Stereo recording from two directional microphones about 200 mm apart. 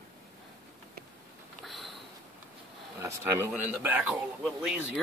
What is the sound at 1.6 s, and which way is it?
Sniff, centre (ahead or behind).